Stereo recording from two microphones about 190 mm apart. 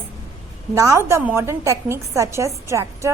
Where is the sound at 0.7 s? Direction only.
15° right (ahead or behind).